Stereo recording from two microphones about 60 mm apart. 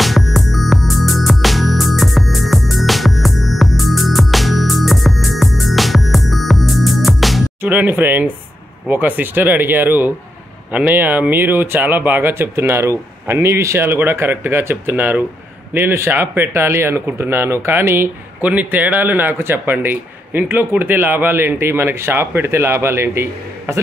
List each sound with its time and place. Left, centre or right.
0.0 s music: centre
7.6 s a man's voice: right
13.7 s a man's voice: right
15.7 s speech: right
18.4 s a man's voice: right